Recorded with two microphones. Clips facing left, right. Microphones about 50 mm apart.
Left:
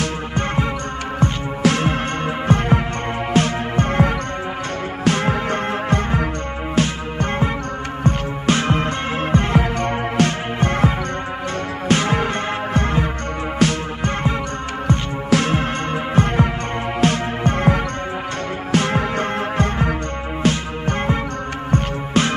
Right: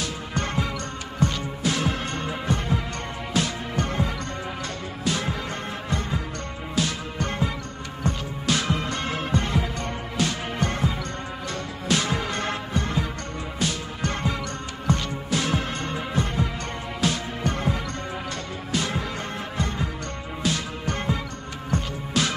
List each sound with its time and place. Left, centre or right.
0.3 s music: left
11.9 s music: left
13.6 s music: left
14.9 s music: left
18.7 s music: left
20.4 s music: left